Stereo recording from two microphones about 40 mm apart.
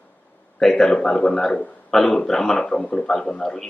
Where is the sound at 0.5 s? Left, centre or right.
Centre.